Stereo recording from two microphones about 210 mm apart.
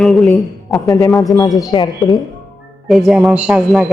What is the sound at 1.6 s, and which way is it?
Speech, 20° left (ahead or behind).